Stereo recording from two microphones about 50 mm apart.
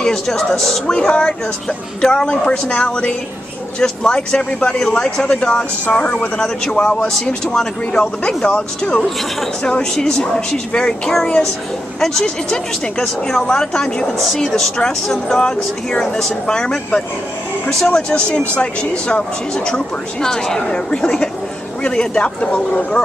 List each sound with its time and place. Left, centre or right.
0.0 s speech: centre